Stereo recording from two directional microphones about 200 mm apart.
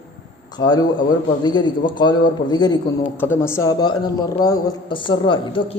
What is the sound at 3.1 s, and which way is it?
A man's voice, 10° left (ahead or behind).